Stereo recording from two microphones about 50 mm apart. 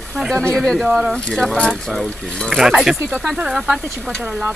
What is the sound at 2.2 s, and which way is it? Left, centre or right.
Speech, centre.